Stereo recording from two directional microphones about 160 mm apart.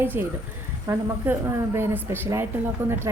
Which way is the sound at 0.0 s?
15° right (ahead or behind).